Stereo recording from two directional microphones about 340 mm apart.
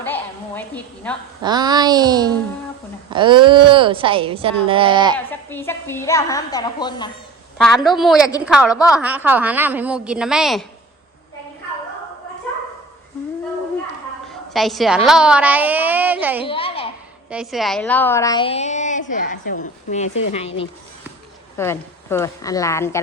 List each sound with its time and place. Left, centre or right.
0.0 s a sound: centre
1.4 s a woman's voice: centre
5.1 s a woman's voice: centre
7.6 s a woman's voice: centre
14.3 s a woman's voice: centre
16.5 s a sound: centre
17.2 s a woman's voice: centre
21.5 s a woman's voice: centre